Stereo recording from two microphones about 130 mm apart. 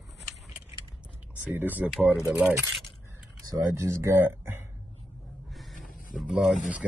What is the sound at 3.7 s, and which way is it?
Speech, 20° right (ahead or behind).